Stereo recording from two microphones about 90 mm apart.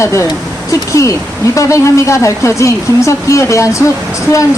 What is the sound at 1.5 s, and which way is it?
Speech, 35° left (ahead or behind).